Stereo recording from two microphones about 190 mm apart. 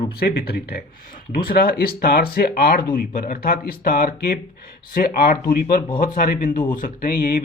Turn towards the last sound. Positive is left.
turn(degrees=50)  # may be behind; listen again after turning